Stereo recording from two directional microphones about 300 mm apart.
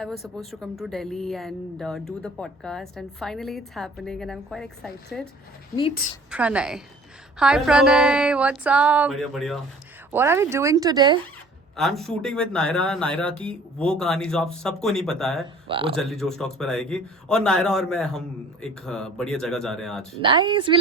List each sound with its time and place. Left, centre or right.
0.0 s speech: centre
6.3 s speech: centre
11.8 s speech: centre
15.6 s speech: centre
16.0 s speech: centre
20.2 s speech: centre